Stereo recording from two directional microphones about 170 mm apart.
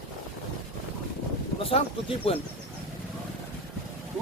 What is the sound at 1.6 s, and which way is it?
Speech, 35° left (ahead or behind).